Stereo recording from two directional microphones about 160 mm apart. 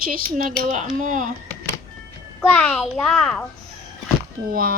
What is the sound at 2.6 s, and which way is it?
Speech, 10° left (ahead or behind).